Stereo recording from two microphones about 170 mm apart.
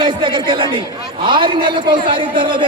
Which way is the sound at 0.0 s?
30° right (ahead or behind).